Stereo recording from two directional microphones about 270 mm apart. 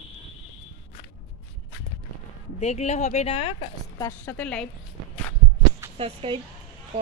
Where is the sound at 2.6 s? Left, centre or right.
Left.